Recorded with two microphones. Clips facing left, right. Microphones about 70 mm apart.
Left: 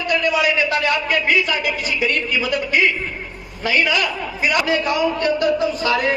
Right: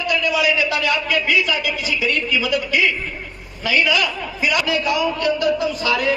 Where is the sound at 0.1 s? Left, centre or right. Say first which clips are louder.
Left 1 dB; left.